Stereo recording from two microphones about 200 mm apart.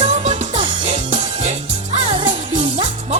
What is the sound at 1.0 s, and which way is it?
Music, 35° right (ahead or behind).